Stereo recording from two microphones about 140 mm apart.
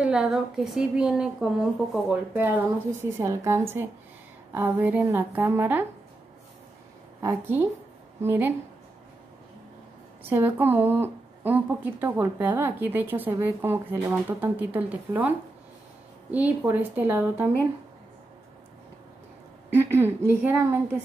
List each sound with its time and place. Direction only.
0.0 s a woman's voice: 5° right (ahead or behind)
7.2 s speech: 15° right (ahead or behind)
10.3 s speech: 15° right (ahead or behind)
19.7 s speech: 15° right (ahead or behind)